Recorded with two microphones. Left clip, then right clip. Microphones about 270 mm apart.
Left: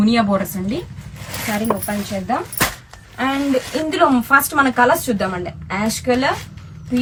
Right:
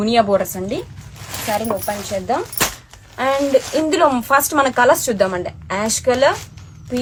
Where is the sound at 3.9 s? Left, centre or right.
Right.